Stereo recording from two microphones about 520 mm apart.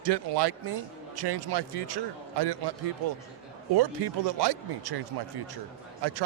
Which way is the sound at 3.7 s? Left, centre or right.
Right.